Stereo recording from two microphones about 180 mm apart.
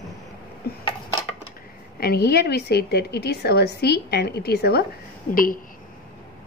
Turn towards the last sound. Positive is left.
turn(degrees=50)  # may be behind; listen again after turning